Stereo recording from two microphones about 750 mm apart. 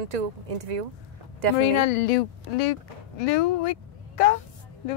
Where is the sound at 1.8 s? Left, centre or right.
Left.